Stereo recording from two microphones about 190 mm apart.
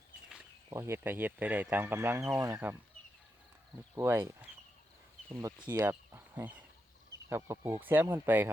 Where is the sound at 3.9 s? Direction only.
10° right (ahead or behind).